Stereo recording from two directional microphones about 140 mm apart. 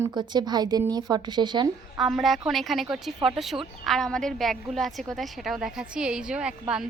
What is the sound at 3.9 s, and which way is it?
A woman's voice, 5° left (ahead or behind).